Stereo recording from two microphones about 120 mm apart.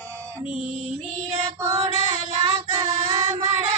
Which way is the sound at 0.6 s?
90° right.